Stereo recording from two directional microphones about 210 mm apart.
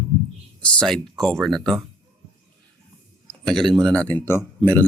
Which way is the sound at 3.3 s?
Centre (ahead or behind).